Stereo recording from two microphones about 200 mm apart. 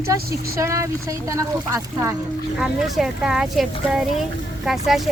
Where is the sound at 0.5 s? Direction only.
15° right (ahead or behind).